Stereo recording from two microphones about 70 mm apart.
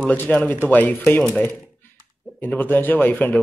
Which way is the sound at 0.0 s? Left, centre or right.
Left.